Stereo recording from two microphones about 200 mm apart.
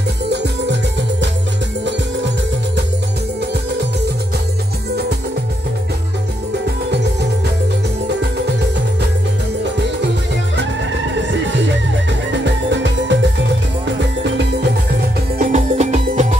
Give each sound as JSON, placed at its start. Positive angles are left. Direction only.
{"t": 0.3, "sound": "music", "side_deg": -60}
{"t": 11.3, "sound": "music", "side_deg": -65}
{"t": 15.3, "sound": "music", "side_deg": -40}